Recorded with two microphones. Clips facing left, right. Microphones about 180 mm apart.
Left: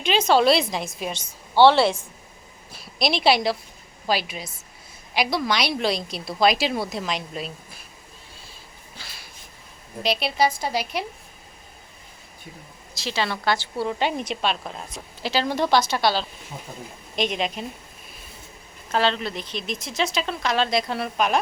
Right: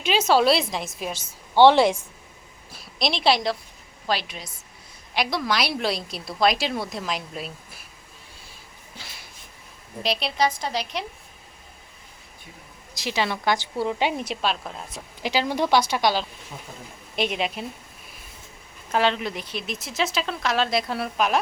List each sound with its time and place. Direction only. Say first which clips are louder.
0.0 s speech: left 1 dB; 5° right (ahead or behind)
1.5 s a woman's voice: right 1 dB; 15° right (ahead or behind)
2.7 s speech: left 2 dB; 5° left (ahead or behind)
9.0 s a sound: right 1 dB; 20° right (ahead or behind)
10.0 s speech: left 2 dB; centre (ahead or behind)
12.9 s a woman's voice: right 1 dB; 15° right (ahead or behind)
15.2 s a woman's voice: even; 15° right (ahead or behind)
18.9 s speech: even; 15° right (ahead or behind)